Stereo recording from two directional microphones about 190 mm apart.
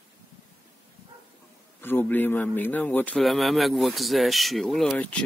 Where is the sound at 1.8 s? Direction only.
10° left (ahead or behind).